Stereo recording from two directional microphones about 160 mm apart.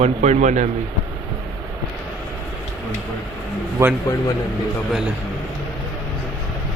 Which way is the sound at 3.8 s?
20° right (ahead or behind).